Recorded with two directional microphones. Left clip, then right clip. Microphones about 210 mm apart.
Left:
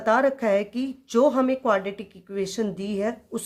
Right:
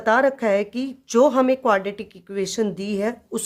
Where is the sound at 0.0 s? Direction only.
20° right (ahead or behind).